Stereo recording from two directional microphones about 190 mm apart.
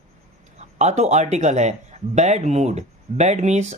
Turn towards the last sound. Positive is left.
turn(degrees=-35)  # may be behind; listen again after turning